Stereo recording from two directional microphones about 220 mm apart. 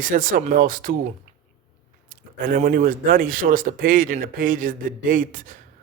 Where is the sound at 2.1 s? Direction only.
40° right (ahead or behind).